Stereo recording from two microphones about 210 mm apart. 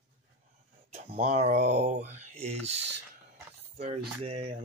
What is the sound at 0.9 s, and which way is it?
Speech, 35° right (ahead or behind).